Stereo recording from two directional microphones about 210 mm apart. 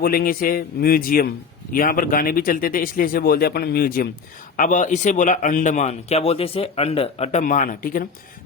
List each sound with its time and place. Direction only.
0.0 s a man's voice: 45° left (ahead or behind)